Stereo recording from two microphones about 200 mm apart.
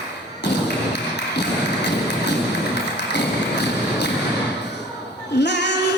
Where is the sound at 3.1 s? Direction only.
60° left (ahead or behind).